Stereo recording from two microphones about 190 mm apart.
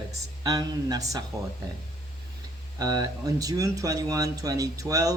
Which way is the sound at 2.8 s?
20° right (ahead or behind).